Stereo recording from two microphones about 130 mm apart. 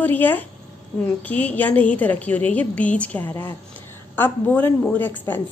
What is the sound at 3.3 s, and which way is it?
Speech, 30° left (ahead or behind).